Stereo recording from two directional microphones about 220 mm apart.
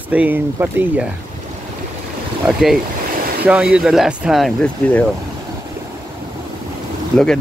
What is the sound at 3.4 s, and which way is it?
Speech, 5° right (ahead or behind).